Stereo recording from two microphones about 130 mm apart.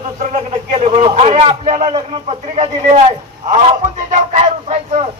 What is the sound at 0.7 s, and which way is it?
Speech, 50° right (ahead or behind).